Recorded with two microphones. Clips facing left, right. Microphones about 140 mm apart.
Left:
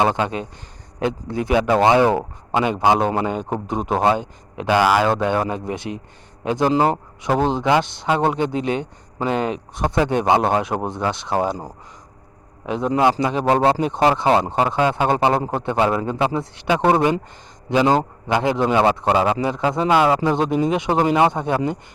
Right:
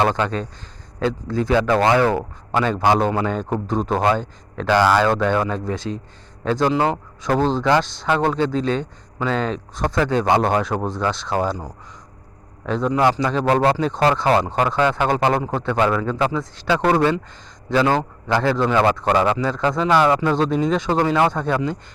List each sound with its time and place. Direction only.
0.0 s a man's voice: 15° left (ahead or behind)
12.6 s a man's voice: 15° left (ahead or behind)